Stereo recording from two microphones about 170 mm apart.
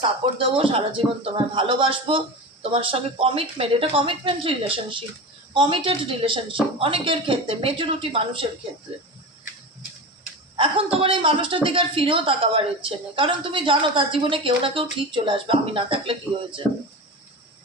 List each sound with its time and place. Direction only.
0.3 s a woman's voice: 30° right (ahead or behind)
10.6 s a woman's voice: 30° right (ahead or behind)